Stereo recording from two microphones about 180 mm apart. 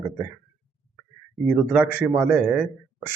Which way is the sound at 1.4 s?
5° right (ahead or behind).